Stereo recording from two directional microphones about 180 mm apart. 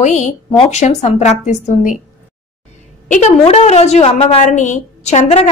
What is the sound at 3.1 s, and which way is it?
A woman's voice, 40° left (ahead or behind).